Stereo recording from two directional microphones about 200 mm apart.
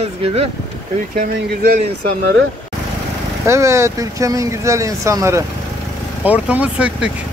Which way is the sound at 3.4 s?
15° right (ahead or behind).